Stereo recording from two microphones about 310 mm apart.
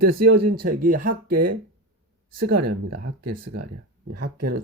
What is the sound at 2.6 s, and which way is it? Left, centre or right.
Speech, right.